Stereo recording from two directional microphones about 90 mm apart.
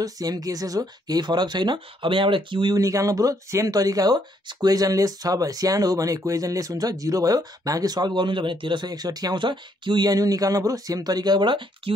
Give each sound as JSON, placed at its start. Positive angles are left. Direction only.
{"t": 0.0, "sound": "speech", "side_deg": -45}
{"t": 2.7, "sound": "speech", "side_deg": -40}